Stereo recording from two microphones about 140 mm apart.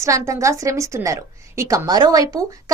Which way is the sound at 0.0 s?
20° right (ahead or behind).